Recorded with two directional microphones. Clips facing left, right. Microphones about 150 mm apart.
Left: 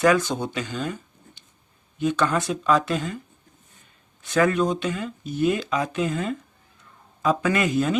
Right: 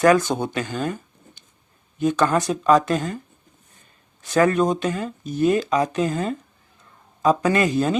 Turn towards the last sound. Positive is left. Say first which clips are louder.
# right 3 dB
turn(degrees=-35)  # may be behind; listen again after turning